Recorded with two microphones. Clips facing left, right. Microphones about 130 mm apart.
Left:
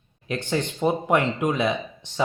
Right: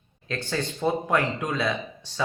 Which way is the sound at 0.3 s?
15° left (ahead or behind).